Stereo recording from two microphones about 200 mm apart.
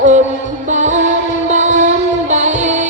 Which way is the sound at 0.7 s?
35° right (ahead or behind).